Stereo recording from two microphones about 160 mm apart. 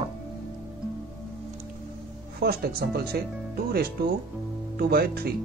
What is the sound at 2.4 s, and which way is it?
Speech, 75° right (ahead or behind).